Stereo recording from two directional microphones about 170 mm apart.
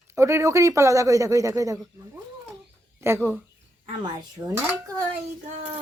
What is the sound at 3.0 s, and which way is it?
Speech, 15° right (ahead or behind).